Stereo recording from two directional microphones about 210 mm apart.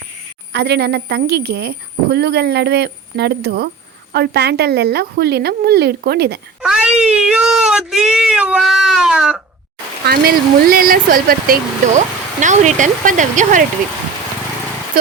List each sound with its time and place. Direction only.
0.5 s a woman's voice: 50° right (ahead or behind)
6.6 s speech: 5° right (ahead or behind)
10.1 s speech: 45° right (ahead or behind)